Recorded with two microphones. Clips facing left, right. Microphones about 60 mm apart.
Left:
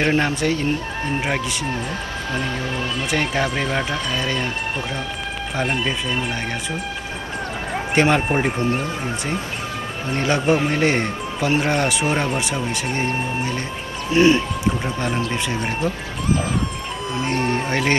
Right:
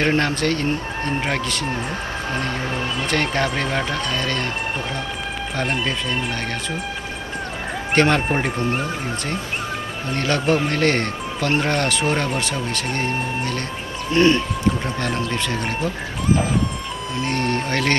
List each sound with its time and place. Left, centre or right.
0.0 s speech: centre
2.3 s speech: right
3.1 s speech: centre
5.6 s speech: centre
7.9 s speech: centre
10.1 s speech: centre
17.2 s speech: centre